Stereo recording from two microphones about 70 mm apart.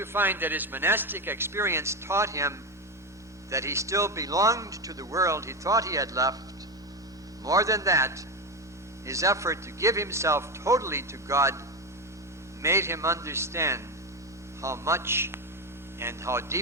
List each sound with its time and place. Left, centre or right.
0.0 s a man's voice: right
7.4 s speech: right
12.6 s a man's voice: right